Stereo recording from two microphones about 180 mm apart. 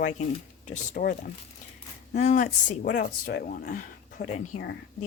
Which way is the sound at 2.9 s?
55° left (ahead or behind).